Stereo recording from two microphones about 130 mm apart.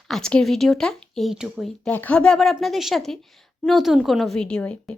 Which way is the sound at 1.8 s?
10° left (ahead or behind).